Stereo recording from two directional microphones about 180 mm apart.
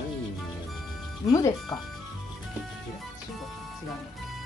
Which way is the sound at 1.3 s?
20° left (ahead or behind).